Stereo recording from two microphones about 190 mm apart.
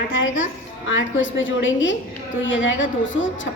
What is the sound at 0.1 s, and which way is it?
A woman's voice, 85° left.